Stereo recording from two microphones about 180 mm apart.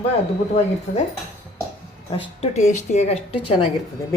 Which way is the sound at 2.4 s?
40° left (ahead or behind).